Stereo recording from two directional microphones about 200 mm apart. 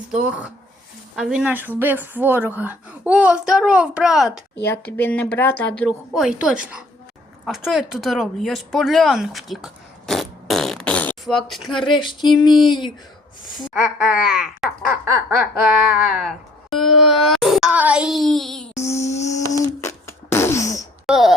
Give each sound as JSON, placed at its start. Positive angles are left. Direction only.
{"t": 1.1, "sound": "speech", "side_deg": -5}
{"t": 4.6, "sound": "a woman's voice", "side_deg": 10}
{"t": 6.2, "sound": "speech", "side_deg": -5}
{"t": 11.9, "sound": "a sound", "side_deg": 25}
{"t": 13.7, "sound": "speech", "side_deg": -5}
{"t": 18.7, "sound": "a woman's voice", "side_deg": 15}
{"t": 19.5, "sound": "a sound", "side_deg": 15}
{"t": 21.1, "sound": "speech", "side_deg": 0}